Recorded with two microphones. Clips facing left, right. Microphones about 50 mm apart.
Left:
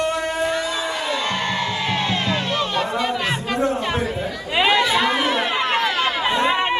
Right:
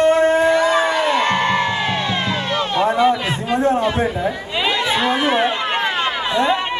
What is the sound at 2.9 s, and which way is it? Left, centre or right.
Chatter, centre.